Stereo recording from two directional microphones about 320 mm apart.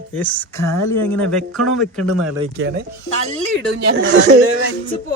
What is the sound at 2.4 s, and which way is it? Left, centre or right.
Speech, right.